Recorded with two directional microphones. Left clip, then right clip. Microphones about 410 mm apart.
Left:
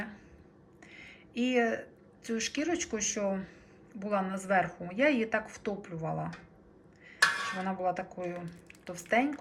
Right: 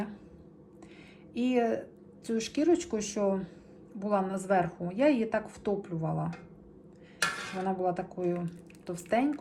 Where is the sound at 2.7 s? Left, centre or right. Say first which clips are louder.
Right 2 dB; right.